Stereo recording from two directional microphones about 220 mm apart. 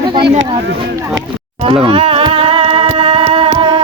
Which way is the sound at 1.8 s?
25° right (ahead or behind).